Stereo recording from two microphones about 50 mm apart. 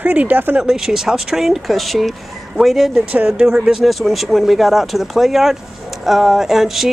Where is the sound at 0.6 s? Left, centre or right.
Centre.